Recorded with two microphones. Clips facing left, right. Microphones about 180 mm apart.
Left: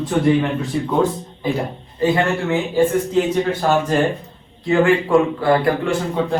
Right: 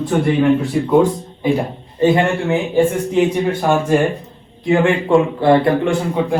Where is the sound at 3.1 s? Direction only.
15° right (ahead or behind).